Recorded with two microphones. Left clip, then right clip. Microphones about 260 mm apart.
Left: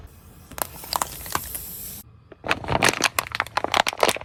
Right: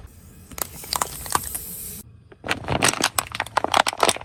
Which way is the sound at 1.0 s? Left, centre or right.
Centre.